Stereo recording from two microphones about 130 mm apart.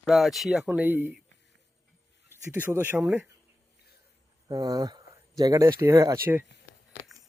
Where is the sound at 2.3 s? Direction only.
15° right (ahead or behind).